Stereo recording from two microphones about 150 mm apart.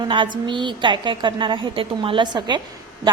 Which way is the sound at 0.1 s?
35° right (ahead or behind).